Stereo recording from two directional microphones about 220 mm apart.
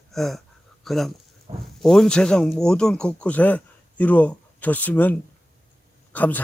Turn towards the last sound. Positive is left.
turn(degrees=5)  # may be behind; listen again after turning